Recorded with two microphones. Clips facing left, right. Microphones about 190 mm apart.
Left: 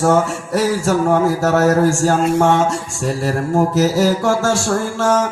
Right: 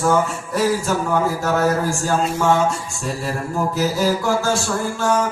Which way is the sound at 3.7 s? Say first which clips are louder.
Left 4 dB; 75° left (ahead or behind).